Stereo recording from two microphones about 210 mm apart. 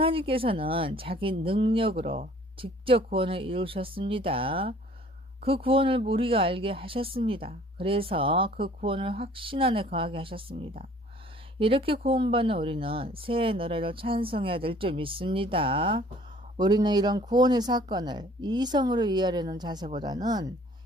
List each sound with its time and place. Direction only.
0.0 s speech: 25° right (ahead or behind)